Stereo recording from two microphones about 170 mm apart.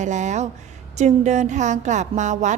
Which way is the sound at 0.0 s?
45° right (ahead or behind).